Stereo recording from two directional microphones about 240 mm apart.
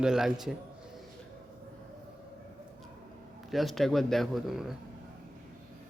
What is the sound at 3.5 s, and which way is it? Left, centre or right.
A man's voice, centre.